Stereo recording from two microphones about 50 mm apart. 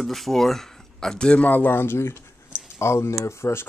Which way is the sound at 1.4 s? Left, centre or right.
Left.